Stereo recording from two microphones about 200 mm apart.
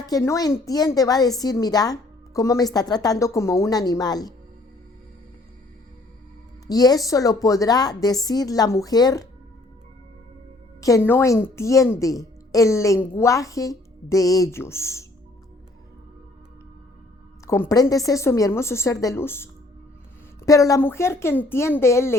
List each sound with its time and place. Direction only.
0.0 s a woman's voice: 15° left (ahead or behind)
6.7 s a woman's voice: 20° left (ahead or behind)
10.8 s a woman's voice: 15° left (ahead or behind)
17.4 s a woman's voice: 15° left (ahead or behind)